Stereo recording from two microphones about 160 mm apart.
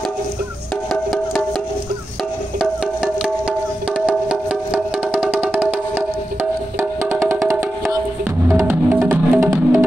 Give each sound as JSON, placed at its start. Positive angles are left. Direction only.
{"t": 2.6, "sound": "music", "side_deg": -5}